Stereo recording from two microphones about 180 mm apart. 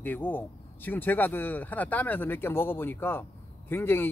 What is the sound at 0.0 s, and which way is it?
Speech, 10° left (ahead or behind).